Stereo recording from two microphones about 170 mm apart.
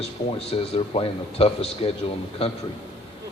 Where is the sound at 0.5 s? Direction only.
35° left (ahead or behind).